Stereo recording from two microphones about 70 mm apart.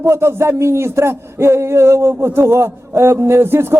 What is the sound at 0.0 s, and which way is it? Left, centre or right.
A man's voice, right.